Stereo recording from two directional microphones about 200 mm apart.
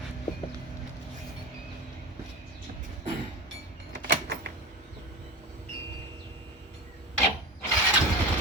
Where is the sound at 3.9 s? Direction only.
55° right (ahead or behind).